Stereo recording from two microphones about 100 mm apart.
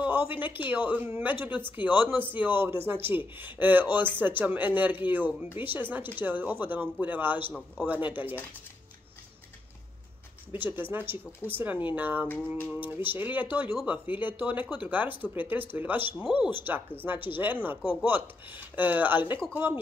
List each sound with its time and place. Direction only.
0.0 s a sound: 20° right (ahead or behind)
0.7 s speech: 15° right (ahead or behind)
10.6 s speech: 20° right (ahead or behind)